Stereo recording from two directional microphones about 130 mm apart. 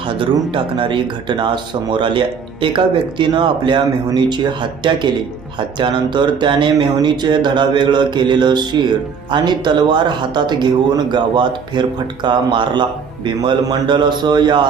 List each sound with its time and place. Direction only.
0.0 s speech: 40° right (ahead or behind)